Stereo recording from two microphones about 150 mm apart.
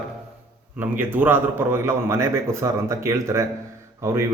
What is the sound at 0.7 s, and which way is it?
A man's voice, 10° right (ahead or behind).